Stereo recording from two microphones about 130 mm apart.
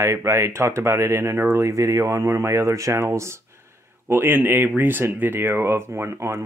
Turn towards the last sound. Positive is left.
turn(degrees=-20)  # may be behind; listen again after turning